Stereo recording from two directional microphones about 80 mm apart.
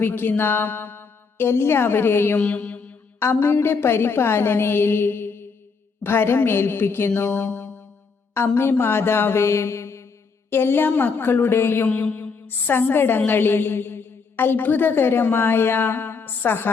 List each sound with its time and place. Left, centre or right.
0.0 s a woman's voice: left
2.4 s mantra: centre
3.2 s a woman's voice: left
7.3 s music: left
8.5 s a sound: left
10.5 s a woman's voice: left